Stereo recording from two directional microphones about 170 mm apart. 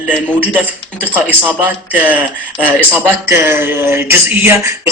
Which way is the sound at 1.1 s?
10° right (ahead or behind).